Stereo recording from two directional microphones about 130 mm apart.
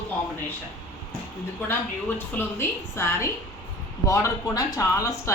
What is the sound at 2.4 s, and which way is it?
A woman's voice, 20° left (ahead or behind).